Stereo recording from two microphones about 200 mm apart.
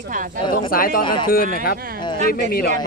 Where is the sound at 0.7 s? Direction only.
45° left (ahead or behind).